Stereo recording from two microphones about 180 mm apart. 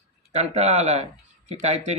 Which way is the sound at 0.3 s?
40° right (ahead or behind).